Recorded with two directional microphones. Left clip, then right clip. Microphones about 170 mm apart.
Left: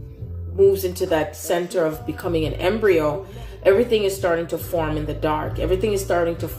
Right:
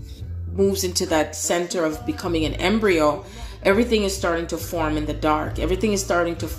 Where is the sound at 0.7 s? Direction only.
45° right (ahead or behind).